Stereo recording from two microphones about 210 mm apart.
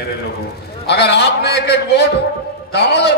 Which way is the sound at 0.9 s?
55° left (ahead or behind).